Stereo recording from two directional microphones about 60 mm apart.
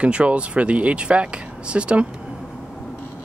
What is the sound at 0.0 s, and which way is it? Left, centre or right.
Speech, centre.